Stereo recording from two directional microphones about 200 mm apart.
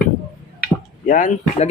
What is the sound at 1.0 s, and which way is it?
Speech, 40° left (ahead or behind).